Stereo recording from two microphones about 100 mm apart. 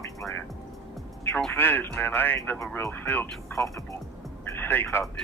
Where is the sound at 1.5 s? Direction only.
20° left (ahead or behind).